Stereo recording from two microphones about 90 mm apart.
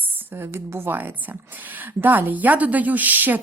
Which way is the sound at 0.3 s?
25° right (ahead or behind).